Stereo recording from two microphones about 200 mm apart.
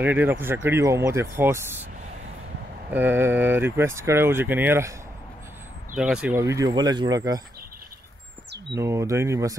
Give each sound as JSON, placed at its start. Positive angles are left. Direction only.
{"t": 0.0, "sound": "speech", "side_deg": -10}
{"t": 2.9, "sound": "speech", "side_deg": -10}
{"t": 5.9, "sound": "speech", "side_deg": -5}
{"t": 8.6, "sound": "speech", "side_deg": -15}